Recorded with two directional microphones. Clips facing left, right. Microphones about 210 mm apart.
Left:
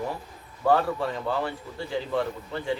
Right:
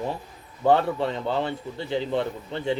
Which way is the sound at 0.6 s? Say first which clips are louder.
Right 2 dB; 25° right (ahead or behind).